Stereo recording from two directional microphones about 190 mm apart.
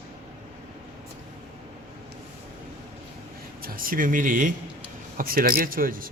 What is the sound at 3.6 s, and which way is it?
Speech, 45° right (ahead or behind).